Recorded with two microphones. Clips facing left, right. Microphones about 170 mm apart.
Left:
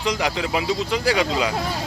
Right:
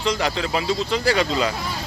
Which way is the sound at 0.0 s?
15° left (ahead or behind).